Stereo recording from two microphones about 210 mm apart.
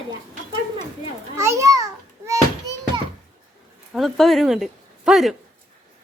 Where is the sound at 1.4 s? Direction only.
15° right (ahead or behind).